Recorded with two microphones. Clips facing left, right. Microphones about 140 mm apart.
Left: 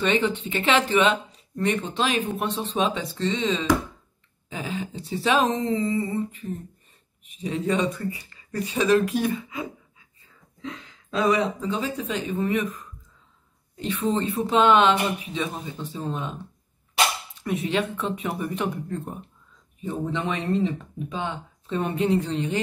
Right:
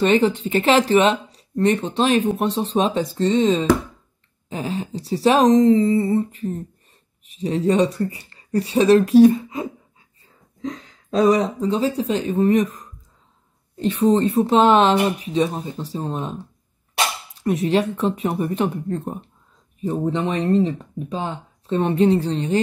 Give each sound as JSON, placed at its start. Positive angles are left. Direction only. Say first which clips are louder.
{"t": 0.0, "sound": "speech", "louder": "right 6 dB", "side_deg": -35}
{"t": 17.6, "sound": "speech", "louder": "right 7 dB", "side_deg": -35}